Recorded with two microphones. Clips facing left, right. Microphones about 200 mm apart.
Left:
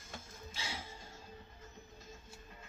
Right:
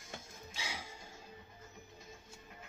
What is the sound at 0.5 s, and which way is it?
Music, 15° right (ahead or behind).